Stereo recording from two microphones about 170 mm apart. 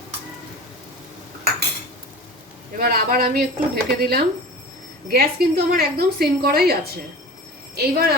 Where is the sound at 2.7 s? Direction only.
65° right (ahead or behind).